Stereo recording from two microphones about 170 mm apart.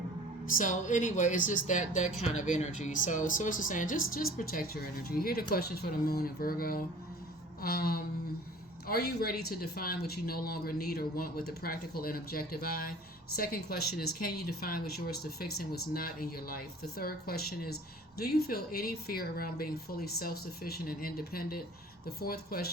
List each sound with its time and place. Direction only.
0.5 s speech: 50° left (ahead or behind)